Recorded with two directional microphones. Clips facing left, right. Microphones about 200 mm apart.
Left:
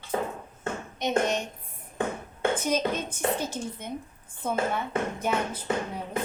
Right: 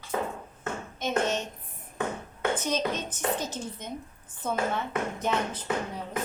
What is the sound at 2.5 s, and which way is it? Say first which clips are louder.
A woman's voice: left 1 dB; 10° left (ahead or behind).